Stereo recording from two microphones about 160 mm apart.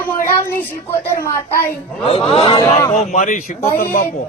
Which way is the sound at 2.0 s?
35° left (ahead or behind).